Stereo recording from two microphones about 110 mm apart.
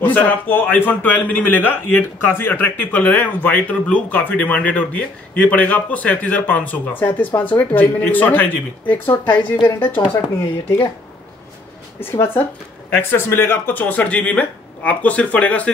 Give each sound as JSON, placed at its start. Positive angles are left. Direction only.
{"t": 0.0, "sound": "a man's voice", "side_deg": 15}
{"t": 12.0, "sound": "a man's voice", "side_deg": 20}